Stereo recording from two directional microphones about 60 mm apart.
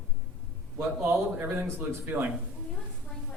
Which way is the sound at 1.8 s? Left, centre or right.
Right.